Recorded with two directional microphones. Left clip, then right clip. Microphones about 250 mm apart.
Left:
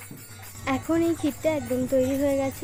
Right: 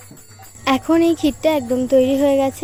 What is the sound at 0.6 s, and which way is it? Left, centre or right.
Speech, right.